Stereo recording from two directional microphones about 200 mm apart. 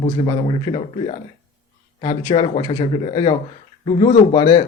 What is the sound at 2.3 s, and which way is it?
Speech, 25° left (ahead or behind).